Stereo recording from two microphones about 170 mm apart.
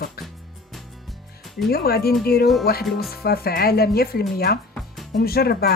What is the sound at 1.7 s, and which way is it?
Speech, 65° left (ahead or behind).